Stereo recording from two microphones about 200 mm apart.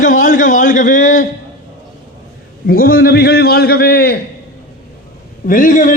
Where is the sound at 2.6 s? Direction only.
45° left (ahead or behind).